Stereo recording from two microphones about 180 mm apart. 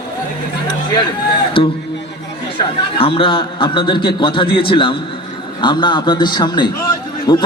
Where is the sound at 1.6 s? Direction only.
30° left (ahead or behind).